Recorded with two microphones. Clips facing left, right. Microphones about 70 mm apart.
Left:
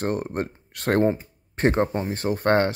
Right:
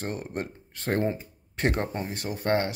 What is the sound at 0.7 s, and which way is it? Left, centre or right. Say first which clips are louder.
Speech: left 6 dB; left.